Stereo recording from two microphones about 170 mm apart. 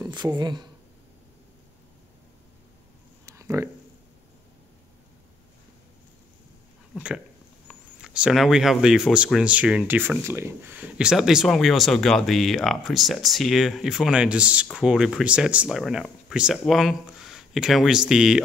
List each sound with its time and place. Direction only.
0.0 s speech: 25° right (ahead or behind)
3.3 s a sound: 20° right (ahead or behind)
7.6 s speech: 5° right (ahead or behind)